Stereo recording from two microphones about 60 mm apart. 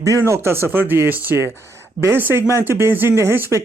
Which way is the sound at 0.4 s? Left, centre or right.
Right.